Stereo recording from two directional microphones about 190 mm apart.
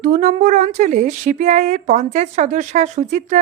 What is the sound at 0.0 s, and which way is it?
Speech, 40° right (ahead or behind).